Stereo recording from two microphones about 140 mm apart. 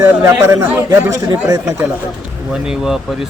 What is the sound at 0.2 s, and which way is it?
Speech, 20° right (ahead or behind).